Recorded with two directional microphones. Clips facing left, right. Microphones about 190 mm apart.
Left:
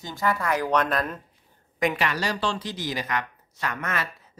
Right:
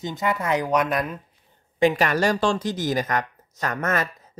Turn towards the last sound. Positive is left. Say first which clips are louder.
# right 6 dB
turn(degrees=-45)  # may be behind; listen again after turning